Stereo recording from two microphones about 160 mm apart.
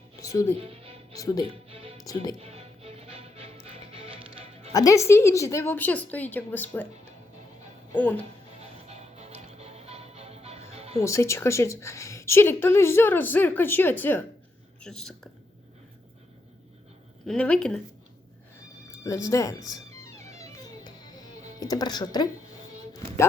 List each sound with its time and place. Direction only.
0.2 s music: 20° left (ahead or behind)
0.6 s music: 35° right (ahead or behind)
1.1 s speech: 20° left (ahead or behind)
1.5 s music: 40° right (ahead or behind)
4.7 s a woman's voice: 20° left (ahead or behind)
7.9 s a woman's voice: 10° left (ahead or behind)
8.9 s music: 40° right (ahead or behind)
11.0 s a woman's voice: 20° left (ahead or behind); by 15.3 s 5° left (ahead or behind)
17.2 s speech: 5° left (ahead or behind)
18.9 s speech: 20° left (ahead or behind)
20.4 s music: 25° left (ahead or behind)
21.6 s speech: 25° left (ahead or behind)